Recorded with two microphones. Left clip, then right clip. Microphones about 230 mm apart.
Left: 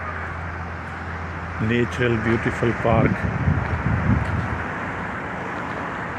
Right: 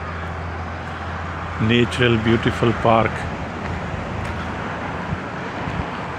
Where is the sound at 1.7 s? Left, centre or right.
Centre.